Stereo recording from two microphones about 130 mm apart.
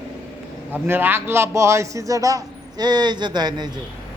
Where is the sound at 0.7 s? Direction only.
15° right (ahead or behind).